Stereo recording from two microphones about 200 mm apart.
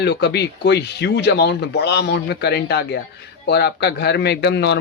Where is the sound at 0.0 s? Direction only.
55° left (ahead or behind).